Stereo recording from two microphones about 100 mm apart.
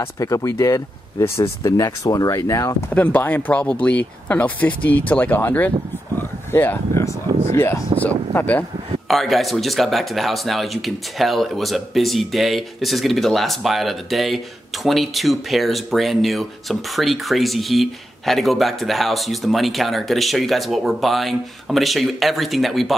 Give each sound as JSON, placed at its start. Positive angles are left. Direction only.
{"t": 0.0, "sound": "speech", "side_deg": 35}
{"t": 2.9, "sound": "speech", "side_deg": 15}
{"t": 6.1, "sound": "a sound", "side_deg": 20}
{"t": 7.5, "sound": "speech", "side_deg": 25}
{"t": 9.0, "sound": "speech", "side_deg": 0}